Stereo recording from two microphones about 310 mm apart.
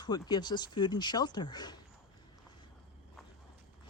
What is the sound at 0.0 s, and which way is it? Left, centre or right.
Speech, centre.